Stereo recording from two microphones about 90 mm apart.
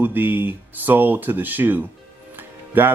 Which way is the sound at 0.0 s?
20° right (ahead or behind).